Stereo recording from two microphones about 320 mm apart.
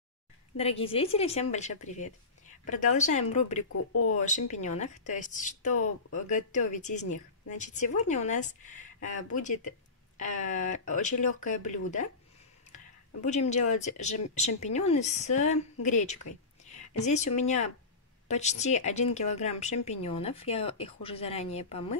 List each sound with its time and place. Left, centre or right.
0.6 s a woman's voice: centre
3.7 s speech: left
4.5 s a woman's voice: left